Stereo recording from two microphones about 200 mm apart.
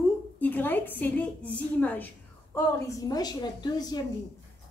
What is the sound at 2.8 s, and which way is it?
A woman's voice, 20° left (ahead or behind).